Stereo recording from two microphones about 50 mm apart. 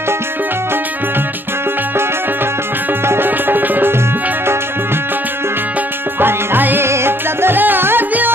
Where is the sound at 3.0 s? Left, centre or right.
Right.